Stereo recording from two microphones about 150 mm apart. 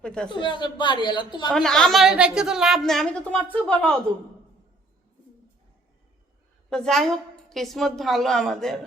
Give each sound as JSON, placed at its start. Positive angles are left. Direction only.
{"t": 0.0, "sound": "a woman's voice", "side_deg": 5}
{"t": 0.3, "sound": "a woman's voice", "side_deg": 30}
{"t": 1.5, "sound": "a woman's voice", "side_deg": 5}
{"t": 6.7, "sound": "a woman's voice", "side_deg": 5}